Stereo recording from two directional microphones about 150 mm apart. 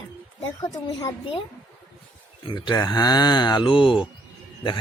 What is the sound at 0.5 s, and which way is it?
Speech, 25° left (ahead or behind).